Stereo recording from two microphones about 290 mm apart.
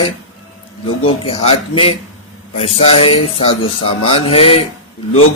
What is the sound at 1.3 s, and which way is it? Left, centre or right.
Speech, centre.